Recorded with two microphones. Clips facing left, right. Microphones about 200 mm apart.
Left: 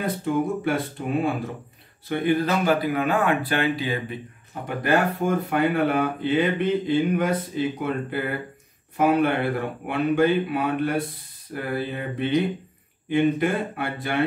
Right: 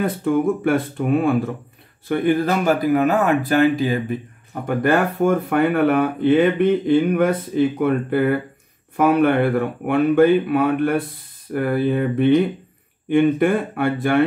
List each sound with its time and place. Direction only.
0.0 s speech: 55° right (ahead or behind)